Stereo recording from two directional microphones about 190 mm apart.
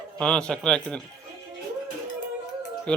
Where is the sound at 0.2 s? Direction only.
5° left (ahead or behind).